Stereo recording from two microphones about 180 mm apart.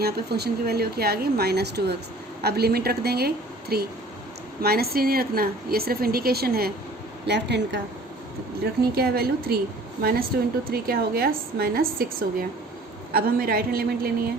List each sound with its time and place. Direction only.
0.0 s a woman's voice: 65° right (ahead or behind)
7.3 s speech: 70° right (ahead or behind)
8.8 s a woman's voice: 60° right (ahead or behind)